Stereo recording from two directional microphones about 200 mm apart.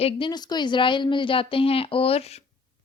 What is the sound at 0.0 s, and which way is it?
A woman's voice, 25° left (ahead or behind).